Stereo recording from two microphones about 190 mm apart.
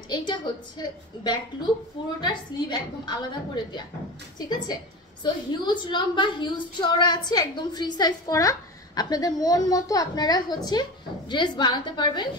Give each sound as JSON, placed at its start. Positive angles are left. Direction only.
{"t": 0.3, "sound": "a woman's voice", "side_deg": 20}